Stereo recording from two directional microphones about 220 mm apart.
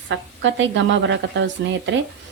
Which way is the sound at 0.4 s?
55° right (ahead or behind).